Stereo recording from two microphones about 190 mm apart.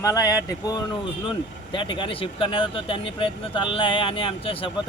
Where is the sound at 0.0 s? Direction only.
20° left (ahead or behind).